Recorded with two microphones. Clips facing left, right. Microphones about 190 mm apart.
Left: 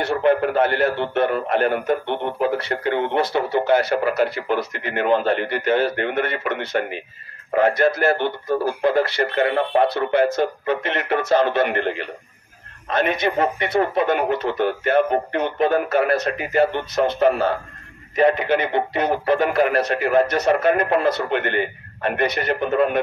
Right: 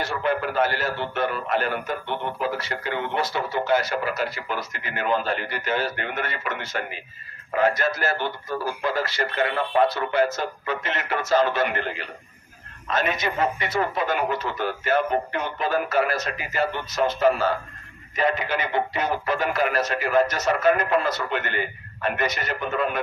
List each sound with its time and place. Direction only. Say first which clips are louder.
0.0 s a man's voice: left 7 dB; 60° left (ahead or behind)
11.6 s a man's voice: left 5 dB; 25° left (ahead or behind)
12.9 s a man's voice: left 5 dB; 60° left (ahead or behind)